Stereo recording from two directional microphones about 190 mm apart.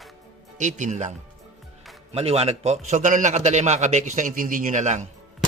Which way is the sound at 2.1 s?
30° right (ahead or behind).